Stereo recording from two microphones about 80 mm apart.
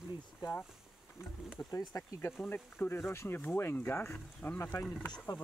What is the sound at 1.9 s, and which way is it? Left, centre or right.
Speech, left.